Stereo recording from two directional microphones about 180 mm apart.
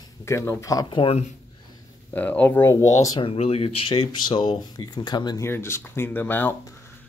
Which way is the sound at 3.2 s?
35° left (ahead or behind).